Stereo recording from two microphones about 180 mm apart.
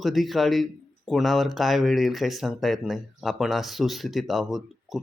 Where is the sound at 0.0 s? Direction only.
Centre (ahead or behind).